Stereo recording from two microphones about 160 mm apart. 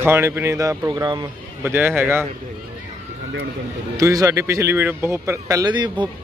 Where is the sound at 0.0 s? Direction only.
15° right (ahead or behind).